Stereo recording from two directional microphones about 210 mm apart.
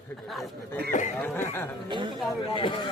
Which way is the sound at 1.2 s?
10° left (ahead or behind).